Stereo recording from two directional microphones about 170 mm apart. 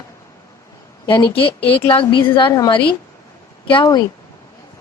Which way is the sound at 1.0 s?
25° left (ahead or behind).